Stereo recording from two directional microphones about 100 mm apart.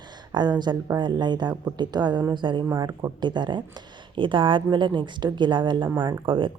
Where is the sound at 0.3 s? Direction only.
50° right (ahead or behind).